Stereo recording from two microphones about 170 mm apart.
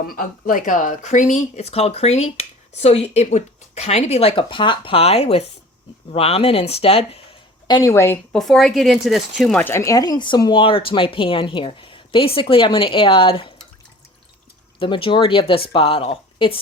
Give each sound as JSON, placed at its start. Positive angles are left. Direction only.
{"t": 0.0, "sound": "speech", "side_deg": 55}
{"t": 7.7, "sound": "a woman's voice", "side_deg": 20}
{"t": 8.3, "sound": "speech", "side_deg": 0}
{"t": 14.8, "sound": "speech", "side_deg": 30}